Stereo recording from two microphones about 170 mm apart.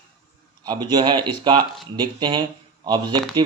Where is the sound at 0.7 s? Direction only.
25° right (ahead or behind).